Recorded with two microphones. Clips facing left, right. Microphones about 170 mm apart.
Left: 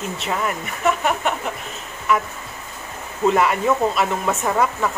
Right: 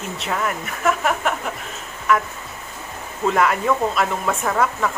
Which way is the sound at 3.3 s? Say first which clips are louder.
Left 1 dB; centre (ahead or behind).